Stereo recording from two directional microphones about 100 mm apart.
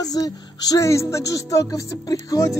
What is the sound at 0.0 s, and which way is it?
Speech, 40° left (ahead or behind).